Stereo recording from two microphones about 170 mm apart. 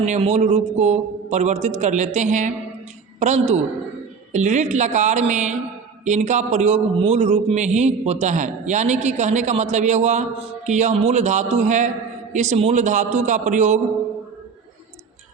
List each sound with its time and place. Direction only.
0.0 s a man's voice: 40° right (ahead or behind)